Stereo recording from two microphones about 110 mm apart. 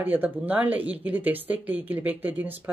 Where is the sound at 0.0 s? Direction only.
15° right (ahead or behind).